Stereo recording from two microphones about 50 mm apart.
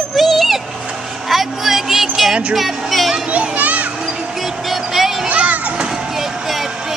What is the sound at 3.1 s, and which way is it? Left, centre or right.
Children playing, right.